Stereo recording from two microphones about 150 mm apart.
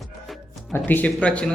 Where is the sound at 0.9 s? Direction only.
10° left (ahead or behind).